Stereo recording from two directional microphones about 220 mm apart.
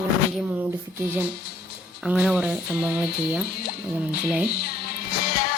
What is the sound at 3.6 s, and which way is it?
Speech, 45° left (ahead or behind).